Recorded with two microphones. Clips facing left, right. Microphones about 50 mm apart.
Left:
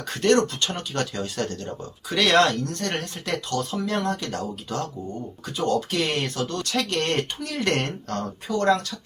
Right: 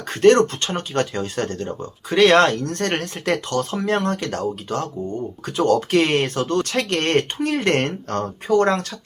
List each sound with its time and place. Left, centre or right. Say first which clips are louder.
0.1 s speech: right 6 dB; right
5.5 s speech: right 6 dB; right